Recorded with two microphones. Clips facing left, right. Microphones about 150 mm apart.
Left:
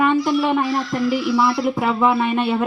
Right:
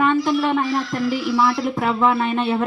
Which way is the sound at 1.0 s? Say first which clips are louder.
Left 4 dB; 50° left (ahead or behind).